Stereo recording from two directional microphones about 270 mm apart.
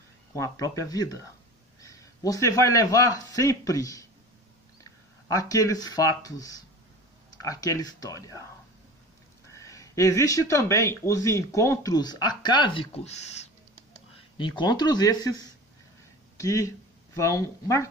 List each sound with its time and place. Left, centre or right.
0.4 s a man's voice: centre
5.3 s speech: centre
9.5 s speech: centre